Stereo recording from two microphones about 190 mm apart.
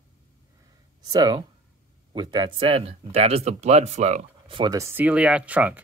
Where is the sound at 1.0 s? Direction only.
20° right (ahead or behind).